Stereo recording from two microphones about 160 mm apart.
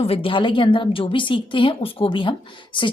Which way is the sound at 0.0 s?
35° left (ahead or behind).